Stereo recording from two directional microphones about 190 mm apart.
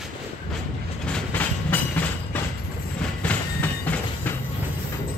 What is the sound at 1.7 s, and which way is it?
Train, 10° left (ahead or behind).